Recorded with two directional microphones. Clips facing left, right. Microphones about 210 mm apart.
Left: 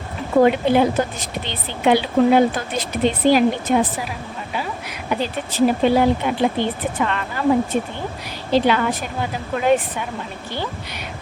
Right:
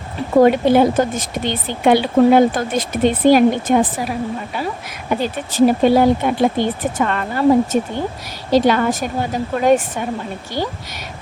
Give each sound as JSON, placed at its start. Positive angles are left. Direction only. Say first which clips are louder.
{"t": 0.4, "sound": "speech", "louder": "right 4 dB", "side_deg": -40}